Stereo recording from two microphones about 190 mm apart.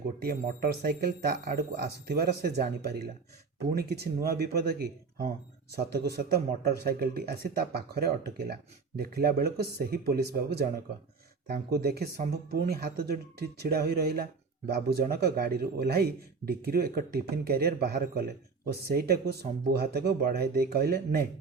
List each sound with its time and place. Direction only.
0.3 s speech: 55° right (ahead or behind)